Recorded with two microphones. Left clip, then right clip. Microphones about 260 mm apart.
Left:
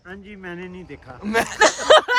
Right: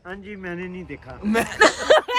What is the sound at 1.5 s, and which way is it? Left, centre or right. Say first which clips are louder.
Speech: right 1 dB; centre.